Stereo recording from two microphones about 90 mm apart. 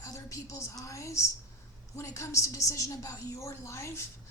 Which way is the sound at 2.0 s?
35° left (ahead or behind).